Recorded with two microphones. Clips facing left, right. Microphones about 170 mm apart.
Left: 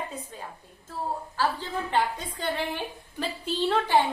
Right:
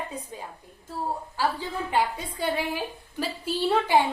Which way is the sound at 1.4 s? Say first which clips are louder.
Even; 10° right (ahead or behind).